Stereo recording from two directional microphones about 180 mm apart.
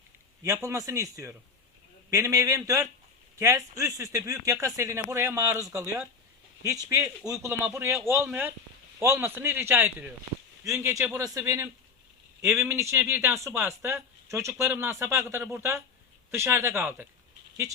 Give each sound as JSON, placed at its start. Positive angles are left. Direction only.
{"t": 0.4, "sound": "speech", "side_deg": -15}